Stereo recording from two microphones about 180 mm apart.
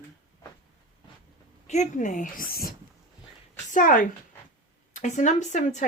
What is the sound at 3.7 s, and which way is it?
Speech, 45° left (ahead or behind).